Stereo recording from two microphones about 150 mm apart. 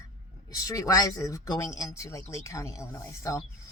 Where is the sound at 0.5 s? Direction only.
20° left (ahead or behind).